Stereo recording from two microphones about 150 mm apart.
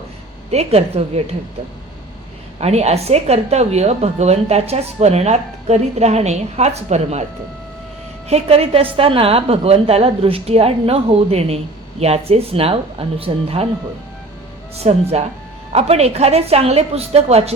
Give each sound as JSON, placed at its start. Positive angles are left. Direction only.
{"t": 0.5, "sound": "a woman's voice", "side_deg": -45}
{"t": 2.6, "sound": "a woman's voice", "side_deg": -45}
{"t": 8.3, "sound": "a woman's voice", "side_deg": -40}
{"t": 14.8, "sound": "a woman's voice", "side_deg": -45}